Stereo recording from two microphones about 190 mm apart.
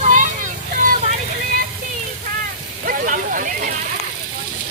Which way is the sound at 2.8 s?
45° right (ahead or behind).